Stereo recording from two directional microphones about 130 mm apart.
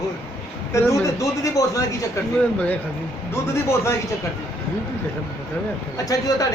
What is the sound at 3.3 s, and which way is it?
Speech, 20° left (ahead or behind).